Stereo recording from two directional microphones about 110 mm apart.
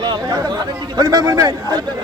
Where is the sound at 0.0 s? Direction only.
40° right (ahead or behind).